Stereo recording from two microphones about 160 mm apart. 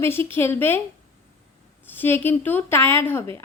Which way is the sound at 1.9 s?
15° left (ahead or behind).